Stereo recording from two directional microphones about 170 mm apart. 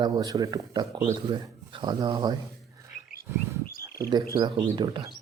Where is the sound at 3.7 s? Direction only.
60° left (ahead or behind).